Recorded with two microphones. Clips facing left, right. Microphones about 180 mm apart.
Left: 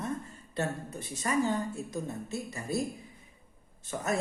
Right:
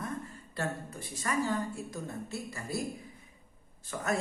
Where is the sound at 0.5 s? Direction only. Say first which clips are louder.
Left 3 dB; 20° left (ahead or behind).